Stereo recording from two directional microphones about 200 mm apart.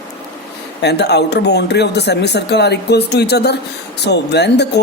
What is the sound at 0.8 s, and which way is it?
Speech, 55° left (ahead or behind).